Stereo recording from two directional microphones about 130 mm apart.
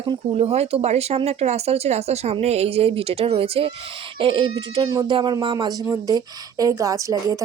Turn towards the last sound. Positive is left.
turn(degrees=-25)  # may be behind; listen again after turning